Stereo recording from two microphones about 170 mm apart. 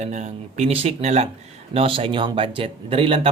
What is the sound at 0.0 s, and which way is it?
Speech, 45° right (ahead or behind).